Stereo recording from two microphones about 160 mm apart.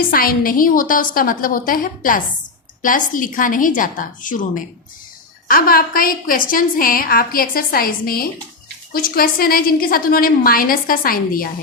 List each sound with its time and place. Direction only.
0.1 s a woman's voice: 65° left (ahead or behind)